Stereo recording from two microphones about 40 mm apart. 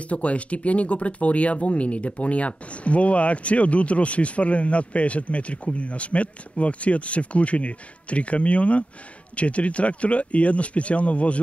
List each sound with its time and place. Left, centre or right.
0.0 s speech: left